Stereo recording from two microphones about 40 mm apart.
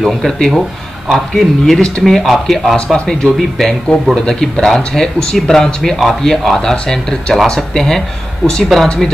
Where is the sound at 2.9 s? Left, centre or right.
Centre.